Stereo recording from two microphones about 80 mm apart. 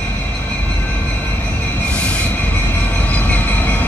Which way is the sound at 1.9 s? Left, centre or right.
Centre.